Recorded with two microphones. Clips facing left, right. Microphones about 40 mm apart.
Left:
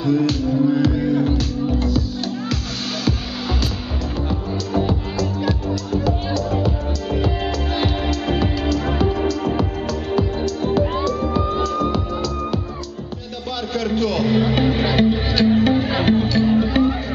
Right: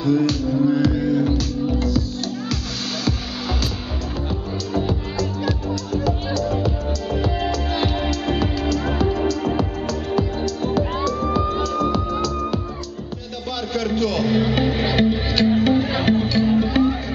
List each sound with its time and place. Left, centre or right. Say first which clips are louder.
0.0 s speech: even; left
1.8 s music: even; left
4.3 s music: left 2 dB; centre
13.7 s music: left 1 dB; centre